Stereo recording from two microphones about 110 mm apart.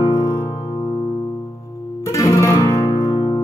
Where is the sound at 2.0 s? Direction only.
30° left (ahead or behind).